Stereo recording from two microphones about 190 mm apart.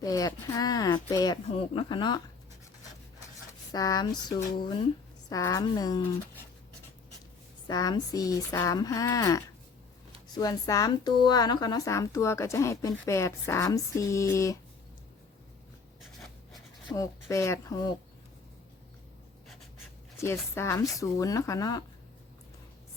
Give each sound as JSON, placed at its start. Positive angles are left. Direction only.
{"t": 0.0, "sound": "speech", "side_deg": 20}
{"t": 3.7, "sound": "speech", "side_deg": 20}
{"t": 7.7, "sound": "speech", "side_deg": 20}
{"t": 16.9, "sound": "speech", "side_deg": 15}
{"t": 20.2, "sound": "speech", "side_deg": 15}